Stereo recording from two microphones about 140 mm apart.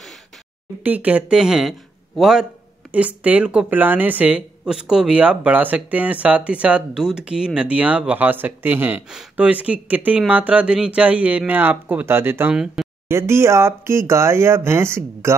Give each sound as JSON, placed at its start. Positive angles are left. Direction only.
{"t": 0.8, "sound": "speech", "side_deg": -10}
{"t": 12.8, "sound": "a sound", "side_deg": 0}
{"t": 13.1, "sound": "speech", "side_deg": -20}